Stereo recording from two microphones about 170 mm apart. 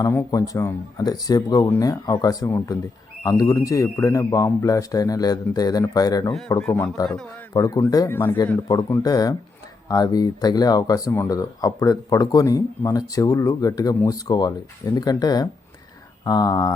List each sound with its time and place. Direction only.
0.0 s speech: 20° left (ahead or behind)
6.5 s speech: 10° left (ahead or behind)
7.5 s speech: 20° left (ahead or behind)